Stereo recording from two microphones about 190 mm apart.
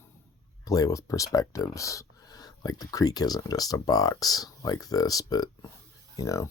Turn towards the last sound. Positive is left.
turn(degrees=15)  # may be behind; listen again after turning